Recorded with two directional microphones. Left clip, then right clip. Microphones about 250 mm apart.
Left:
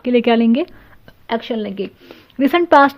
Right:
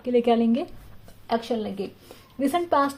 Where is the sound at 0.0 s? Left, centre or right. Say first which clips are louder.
Left 6 dB; left.